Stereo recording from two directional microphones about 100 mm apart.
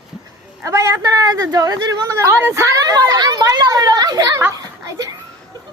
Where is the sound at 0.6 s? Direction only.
30° right (ahead or behind).